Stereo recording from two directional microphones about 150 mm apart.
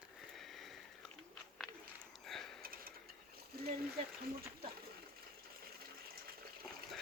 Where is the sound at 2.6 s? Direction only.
75° right (ahead or behind).